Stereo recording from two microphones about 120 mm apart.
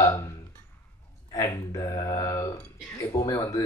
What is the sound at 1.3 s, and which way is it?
Speech, 30° left (ahead or behind).